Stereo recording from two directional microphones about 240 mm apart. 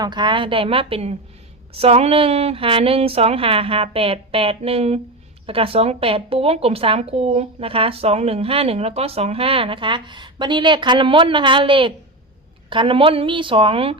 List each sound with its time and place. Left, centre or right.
0.0 s speech: centre